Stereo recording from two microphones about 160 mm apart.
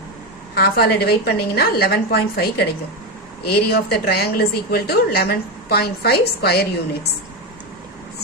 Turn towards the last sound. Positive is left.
turn(degrees=85)